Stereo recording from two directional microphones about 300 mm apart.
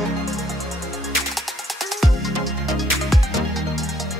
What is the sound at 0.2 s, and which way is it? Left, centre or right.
Music, centre.